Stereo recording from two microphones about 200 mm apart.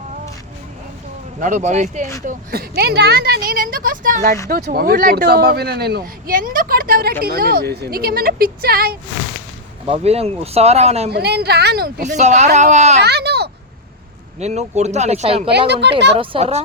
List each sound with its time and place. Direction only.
1.4 s speech: 40° right (ahead or behind)
2.2 s speech: 50° right (ahead or behind)
9.8 s speech: 30° right (ahead or behind)
11.1 s speech: 55° right (ahead or behind)
12.0 s speech: 35° right (ahead or behind)
13.0 s a sound: 55° right (ahead or behind)
14.3 s speech: 35° right (ahead or behind)
15.4 s speech: 55° right (ahead or behind)
16.1 s speech: 25° right (ahead or behind)